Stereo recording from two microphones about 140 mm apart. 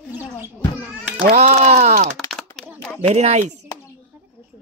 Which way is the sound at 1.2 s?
55° right (ahead or behind).